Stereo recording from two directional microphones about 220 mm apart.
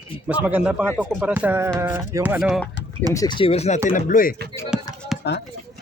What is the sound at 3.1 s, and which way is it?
Speech, 20° left (ahead or behind).